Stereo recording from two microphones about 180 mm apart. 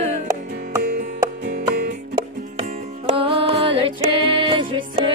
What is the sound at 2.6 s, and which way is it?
Music, 30° right (ahead or behind).